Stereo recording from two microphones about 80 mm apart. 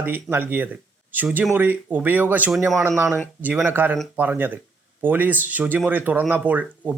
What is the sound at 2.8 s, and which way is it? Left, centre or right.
Speech, right.